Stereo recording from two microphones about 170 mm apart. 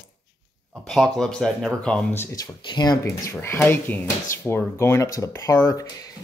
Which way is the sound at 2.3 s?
25° left (ahead or behind).